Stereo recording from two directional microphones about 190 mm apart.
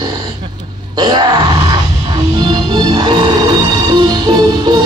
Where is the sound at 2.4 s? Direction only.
20° right (ahead or behind).